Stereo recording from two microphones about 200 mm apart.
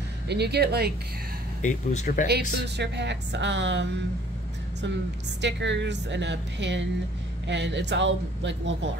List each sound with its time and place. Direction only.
0.3 s speech: 55° right (ahead or behind)
1.6 s speech: 35° left (ahead or behind)
2.2 s speech: 55° right (ahead or behind)
5.4 s speech: 60° right (ahead or behind)